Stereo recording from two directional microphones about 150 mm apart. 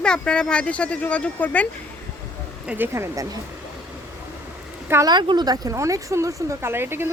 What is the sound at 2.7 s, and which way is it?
Speech, 15° right (ahead or behind).